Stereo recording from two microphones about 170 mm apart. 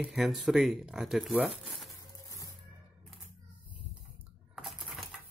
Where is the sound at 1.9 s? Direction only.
20° left (ahead or behind).